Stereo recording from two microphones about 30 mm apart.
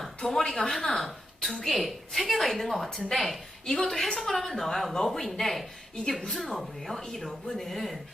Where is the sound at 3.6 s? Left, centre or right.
Centre.